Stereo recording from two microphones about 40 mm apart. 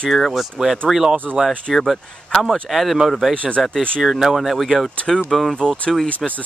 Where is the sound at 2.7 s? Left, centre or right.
Centre.